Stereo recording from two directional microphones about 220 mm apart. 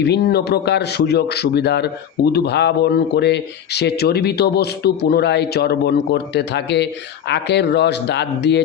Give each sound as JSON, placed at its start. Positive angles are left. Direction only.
{"t": 0.0, "sound": "a man's voice", "side_deg": 50}